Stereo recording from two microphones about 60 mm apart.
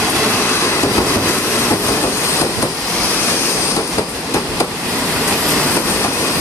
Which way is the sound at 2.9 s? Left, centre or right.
Centre.